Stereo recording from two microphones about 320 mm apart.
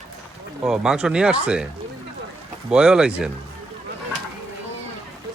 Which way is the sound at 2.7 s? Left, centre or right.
Centre.